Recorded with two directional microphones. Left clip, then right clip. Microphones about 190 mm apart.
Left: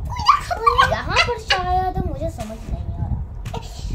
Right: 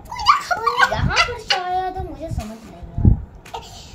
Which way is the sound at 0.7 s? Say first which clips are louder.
Left 3 dB; centre (ahead or behind).